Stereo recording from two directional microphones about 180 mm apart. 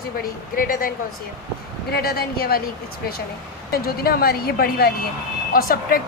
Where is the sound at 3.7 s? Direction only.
55° left (ahead or behind).